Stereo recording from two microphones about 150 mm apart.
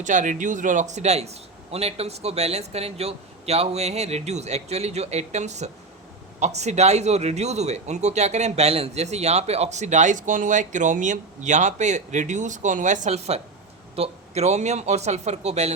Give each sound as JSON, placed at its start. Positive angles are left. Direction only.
{"t": 0.0, "sound": "a man's voice", "side_deg": -55}